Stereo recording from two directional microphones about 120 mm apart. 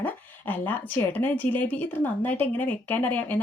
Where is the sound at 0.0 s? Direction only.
15° left (ahead or behind).